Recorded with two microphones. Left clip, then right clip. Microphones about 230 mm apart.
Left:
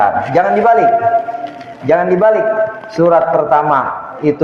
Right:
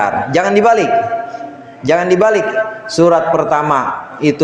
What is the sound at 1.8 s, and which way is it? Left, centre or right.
A man's voice, right.